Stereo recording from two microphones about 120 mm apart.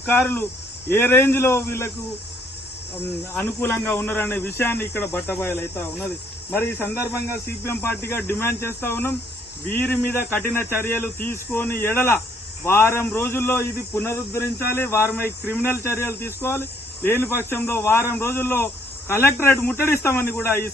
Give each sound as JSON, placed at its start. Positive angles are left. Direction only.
{"t": 0.0, "sound": "speech", "side_deg": 15}
{"t": 3.4, "sound": "speech", "side_deg": 15}